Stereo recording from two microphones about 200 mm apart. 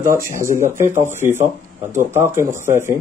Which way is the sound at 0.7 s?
10° right (ahead or behind).